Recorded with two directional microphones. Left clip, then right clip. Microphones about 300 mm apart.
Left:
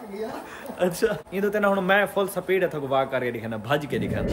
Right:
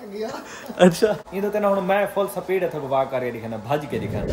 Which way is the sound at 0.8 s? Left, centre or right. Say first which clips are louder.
Right 9 dB; right.